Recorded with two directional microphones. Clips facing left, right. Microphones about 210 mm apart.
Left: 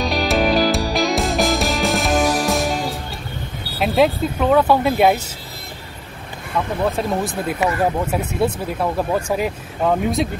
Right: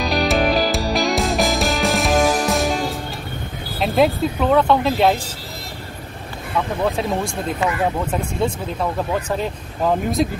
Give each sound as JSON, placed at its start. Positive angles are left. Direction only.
{"t": 0.0, "sound": "music", "side_deg": 0}
{"t": 3.8, "sound": "speech", "side_deg": 0}
{"t": 6.8, "sound": "speech", "side_deg": 0}